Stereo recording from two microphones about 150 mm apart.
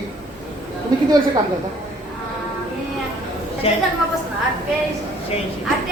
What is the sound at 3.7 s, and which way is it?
Speech, 40° left (ahead or behind).